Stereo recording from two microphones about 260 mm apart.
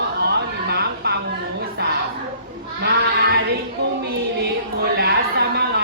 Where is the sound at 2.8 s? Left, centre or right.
Right.